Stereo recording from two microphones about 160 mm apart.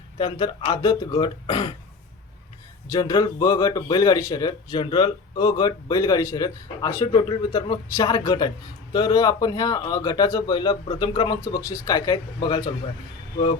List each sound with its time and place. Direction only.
0.2 s speech: 30° left (ahead or behind)
2.9 s speech: 25° left (ahead or behind)